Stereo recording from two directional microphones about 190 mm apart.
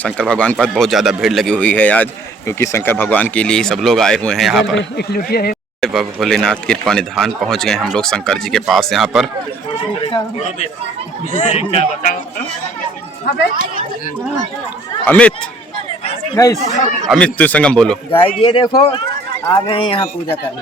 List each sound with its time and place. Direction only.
0.0 s speech: 5° left (ahead or behind)
4.8 s speech: 55° left (ahead or behind)
5.8 s speech: centre (ahead or behind)
10.0 s a sound: 25° left (ahead or behind)
11.3 s speech: 40° left (ahead or behind)
15.0 s speech: 5° left (ahead or behind)
16.0 s speech: 20° left (ahead or behind)
17.1 s speech: 5° left (ahead or behind)
18.2 s speech: 30° left (ahead or behind)